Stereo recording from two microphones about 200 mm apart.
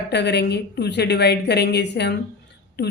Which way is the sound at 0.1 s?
60° left (ahead or behind).